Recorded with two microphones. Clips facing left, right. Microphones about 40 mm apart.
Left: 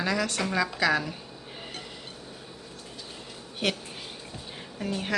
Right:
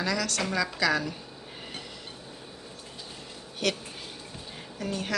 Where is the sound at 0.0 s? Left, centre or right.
Left.